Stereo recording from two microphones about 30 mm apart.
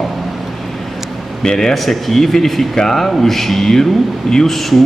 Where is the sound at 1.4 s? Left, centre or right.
Centre.